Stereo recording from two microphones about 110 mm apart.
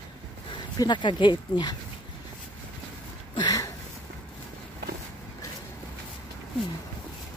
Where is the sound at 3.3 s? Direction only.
35° left (ahead or behind).